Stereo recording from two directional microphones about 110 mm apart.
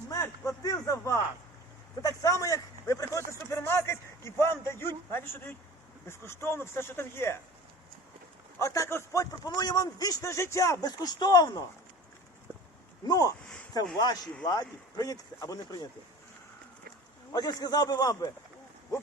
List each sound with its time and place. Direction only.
0.1 s a sound: 30° left (ahead or behind)
2.0 s speech: 30° left (ahead or behind)
8.5 s a man's voice: 25° left (ahead or behind)
13.1 s a man's voice: 35° left (ahead or behind)
14.4 s a man's voice: 35° left (ahead or behind)
17.3 s a man's voice: 35° left (ahead or behind)